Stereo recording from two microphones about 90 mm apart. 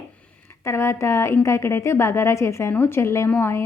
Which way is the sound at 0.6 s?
30° left (ahead or behind).